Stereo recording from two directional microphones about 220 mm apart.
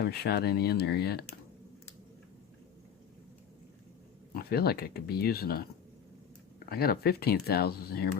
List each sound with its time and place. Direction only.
0.0 s speech: 45° left (ahead or behind)
4.3 s speech: 45° left (ahead or behind)
6.7 s speech: 45° left (ahead or behind)